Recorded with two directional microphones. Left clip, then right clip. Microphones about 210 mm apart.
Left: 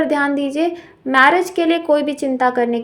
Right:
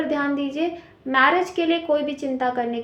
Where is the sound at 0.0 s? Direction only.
50° left (ahead or behind).